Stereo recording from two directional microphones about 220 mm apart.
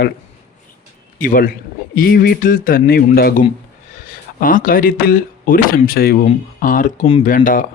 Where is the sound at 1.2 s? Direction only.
40° left (ahead or behind).